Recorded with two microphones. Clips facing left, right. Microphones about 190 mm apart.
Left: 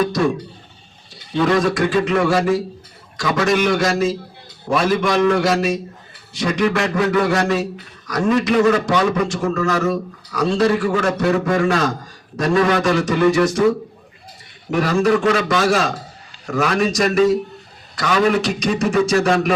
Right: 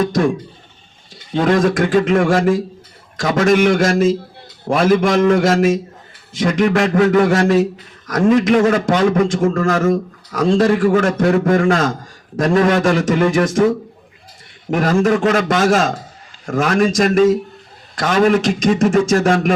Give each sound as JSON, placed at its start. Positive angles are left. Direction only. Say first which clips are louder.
{"t": 1.4, "sound": "a man's voice", "louder": "right 2 dB", "side_deg": -50}
{"t": 14.7, "sound": "a man's voice", "louder": "right 2 dB", "side_deg": -50}